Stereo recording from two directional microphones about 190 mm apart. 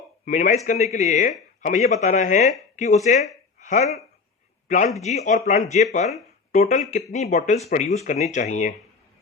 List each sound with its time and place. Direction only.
0.3 s a woman's voice: 40° left (ahead or behind)
5.0 s speech: 35° left (ahead or behind)